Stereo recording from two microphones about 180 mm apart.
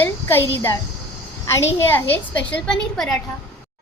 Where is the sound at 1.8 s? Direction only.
10° left (ahead or behind).